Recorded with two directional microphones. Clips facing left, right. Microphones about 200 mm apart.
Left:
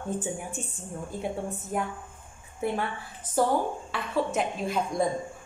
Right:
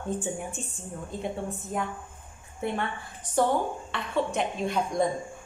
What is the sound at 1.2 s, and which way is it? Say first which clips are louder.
A woman's voice: even; 5° left (ahead or behind).